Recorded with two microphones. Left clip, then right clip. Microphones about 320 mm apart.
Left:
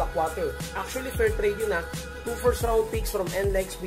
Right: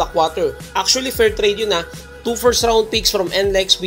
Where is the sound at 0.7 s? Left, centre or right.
Centre.